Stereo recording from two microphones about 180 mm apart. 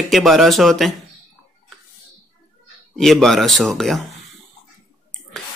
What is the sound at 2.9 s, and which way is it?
Speech, centre (ahead or behind).